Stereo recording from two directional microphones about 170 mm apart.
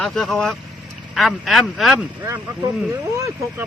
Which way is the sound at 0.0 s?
Centre (ahead or behind).